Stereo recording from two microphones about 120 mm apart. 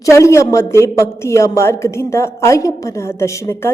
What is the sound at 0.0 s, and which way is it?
A woman's voice, 25° left (ahead or behind).